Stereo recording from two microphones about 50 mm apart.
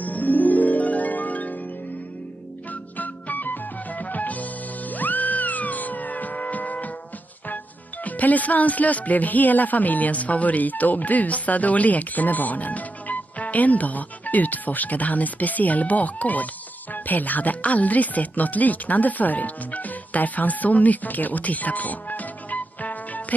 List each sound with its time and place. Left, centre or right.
0.0 s music: left
2.7 s music: left
7.4 s speech: left